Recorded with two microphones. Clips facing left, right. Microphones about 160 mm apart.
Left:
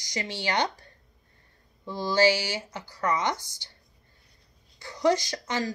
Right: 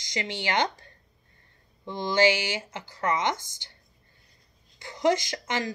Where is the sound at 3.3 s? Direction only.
50° right (ahead or behind).